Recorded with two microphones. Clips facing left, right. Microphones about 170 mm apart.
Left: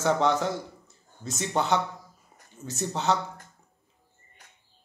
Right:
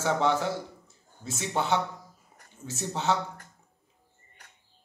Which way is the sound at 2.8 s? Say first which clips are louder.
Left 2 dB; 5° right (ahead or behind).